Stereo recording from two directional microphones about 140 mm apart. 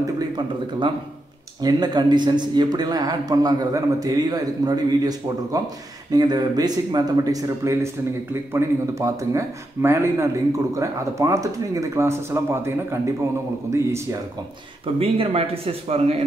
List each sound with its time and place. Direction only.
1.6 s speech: 30° right (ahead or behind)
15.0 s speech: 45° right (ahead or behind)